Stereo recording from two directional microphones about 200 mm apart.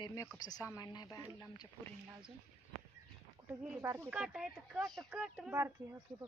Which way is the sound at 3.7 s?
15° right (ahead or behind).